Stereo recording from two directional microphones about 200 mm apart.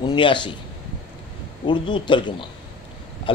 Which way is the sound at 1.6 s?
25° left (ahead or behind).